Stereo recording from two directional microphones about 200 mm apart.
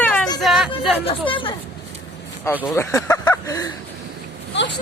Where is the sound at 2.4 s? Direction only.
10° left (ahead or behind).